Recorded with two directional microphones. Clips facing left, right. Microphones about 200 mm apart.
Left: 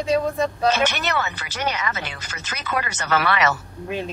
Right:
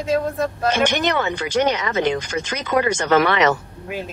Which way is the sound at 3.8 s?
5° right (ahead or behind).